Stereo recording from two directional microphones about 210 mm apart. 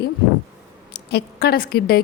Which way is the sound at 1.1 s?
50° left (ahead or behind).